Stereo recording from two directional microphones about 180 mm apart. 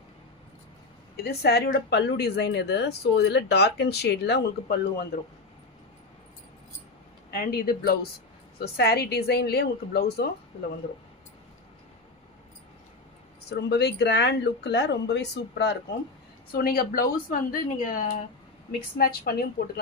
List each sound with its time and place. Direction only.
1.1 s speech: 60° left (ahead or behind)
7.3 s speech: 55° left (ahead or behind)
13.5 s speech: 65° left (ahead or behind)
16.5 s speech: 55° left (ahead or behind)